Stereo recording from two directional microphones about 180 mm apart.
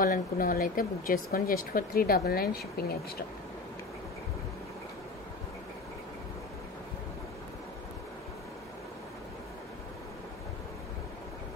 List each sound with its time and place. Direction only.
0.0 s speech: 50° left (ahead or behind)